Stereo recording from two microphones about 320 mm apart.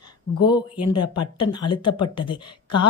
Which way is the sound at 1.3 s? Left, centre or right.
Centre.